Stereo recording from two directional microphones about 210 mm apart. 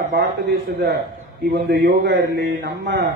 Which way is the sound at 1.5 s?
50° right (ahead or behind).